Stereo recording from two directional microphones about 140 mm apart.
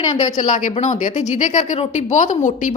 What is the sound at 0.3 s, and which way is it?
A woman's voice, 60° left (ahead or behind).